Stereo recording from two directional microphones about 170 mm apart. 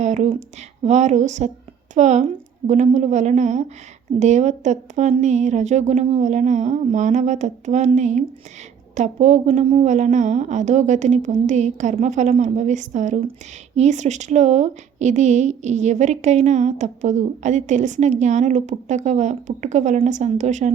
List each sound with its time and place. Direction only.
0.0 s a woman's voice: 40° right (ahead or behind)